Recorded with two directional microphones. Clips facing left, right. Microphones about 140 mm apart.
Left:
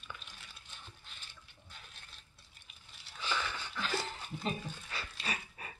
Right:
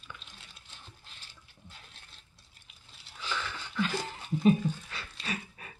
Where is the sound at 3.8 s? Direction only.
15° right (ahead or behind).